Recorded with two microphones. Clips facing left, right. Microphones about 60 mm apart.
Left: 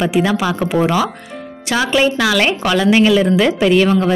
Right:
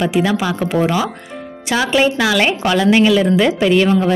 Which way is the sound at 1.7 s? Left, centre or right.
Centre.